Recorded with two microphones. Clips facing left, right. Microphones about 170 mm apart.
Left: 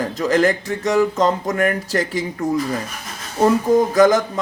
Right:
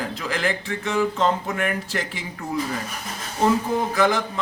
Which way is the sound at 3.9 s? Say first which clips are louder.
Left 6 dB; 40° left (ahead or behind).